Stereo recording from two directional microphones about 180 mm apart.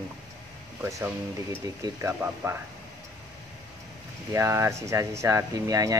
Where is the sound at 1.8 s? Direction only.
15° right (ahead or behind).